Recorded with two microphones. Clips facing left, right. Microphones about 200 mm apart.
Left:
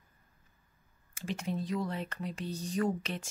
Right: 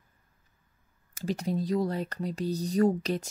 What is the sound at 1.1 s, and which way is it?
Speech, 35° right (ahead or behind).